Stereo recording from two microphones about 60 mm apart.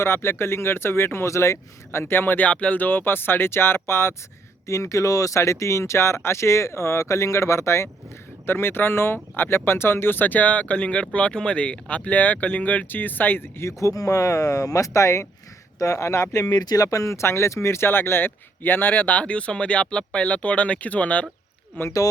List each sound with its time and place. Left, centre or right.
0.0 s speech: left
2.5 s speech: left
4.6 s speech: left
13.7 s speech: left
16.6 s speech: left
21.7 s speech: left